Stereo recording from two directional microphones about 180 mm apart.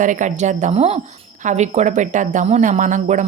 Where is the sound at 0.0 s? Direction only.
45° right (ahead or behind).